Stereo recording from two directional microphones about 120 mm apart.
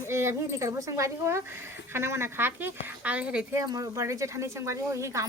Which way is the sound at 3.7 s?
30° right (ahead or behind).